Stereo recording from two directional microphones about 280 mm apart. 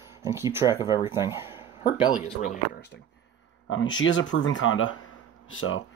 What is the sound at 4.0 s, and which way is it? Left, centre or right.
Speech, left.